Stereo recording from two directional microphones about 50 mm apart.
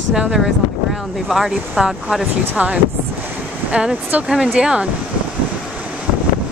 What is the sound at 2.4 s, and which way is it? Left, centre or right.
Speech, right.